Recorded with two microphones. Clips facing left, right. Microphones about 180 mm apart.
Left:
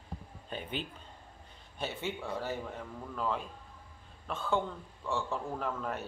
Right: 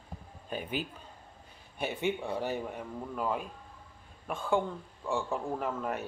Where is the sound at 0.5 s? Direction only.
10° right (ahead or behind).